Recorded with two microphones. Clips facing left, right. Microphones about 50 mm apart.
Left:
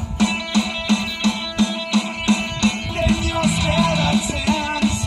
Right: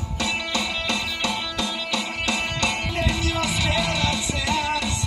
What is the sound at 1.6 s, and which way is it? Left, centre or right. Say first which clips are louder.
Music: left 6 dB; centre.